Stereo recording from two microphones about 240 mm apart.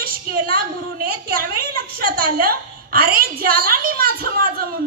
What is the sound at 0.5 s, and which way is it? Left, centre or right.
A woman's voice, right.